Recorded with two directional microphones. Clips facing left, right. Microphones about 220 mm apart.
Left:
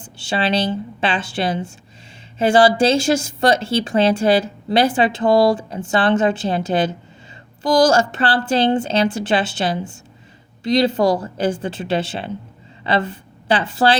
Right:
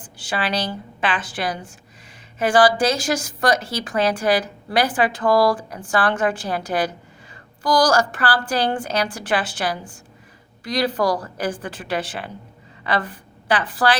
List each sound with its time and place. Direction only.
0.0 s a woman's voice: 25° left (ahead or behind)